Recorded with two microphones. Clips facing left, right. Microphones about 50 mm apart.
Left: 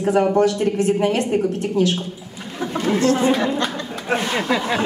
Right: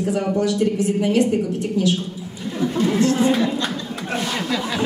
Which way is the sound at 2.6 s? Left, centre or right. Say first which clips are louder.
Right 1 dB; left.